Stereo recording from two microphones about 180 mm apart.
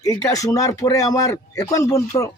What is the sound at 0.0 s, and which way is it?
Speech, 20° left (ahead or behind).